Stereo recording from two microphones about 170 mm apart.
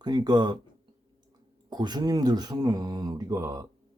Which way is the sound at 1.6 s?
25° right (ahead or behind).